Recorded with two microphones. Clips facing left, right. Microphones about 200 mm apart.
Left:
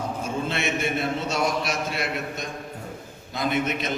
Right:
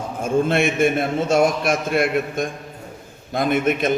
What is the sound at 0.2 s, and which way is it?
A man's voice, 50° right (ahead or behind).